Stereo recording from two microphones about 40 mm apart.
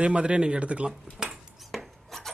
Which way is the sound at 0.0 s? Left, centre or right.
Right.